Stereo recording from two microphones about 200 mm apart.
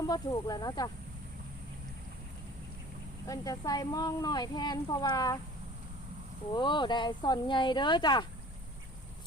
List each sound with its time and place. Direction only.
0.1 s speech: 20° left (ahead or behind)
3.2 s speech: 15° left (ahead or behind)
6.5 s speech: 20° left (ahead or behind)